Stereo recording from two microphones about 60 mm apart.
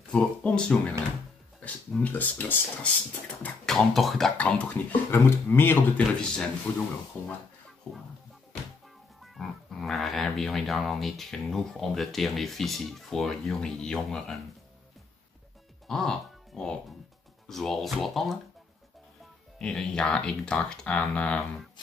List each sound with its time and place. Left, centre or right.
0.1 s speech: centre
2.0 s speech: left
3.6 s speech: centre
4.4 s speech: left
5.1 s a man's voice: left
5.9 s speech: centre
6.7 s speech: left
7.2 s a man's voice: left
7.8 s music: centre
9.2 s speech: centre
15.9 s music: centre
17.5 s speech: centre
19.6 s speech: centre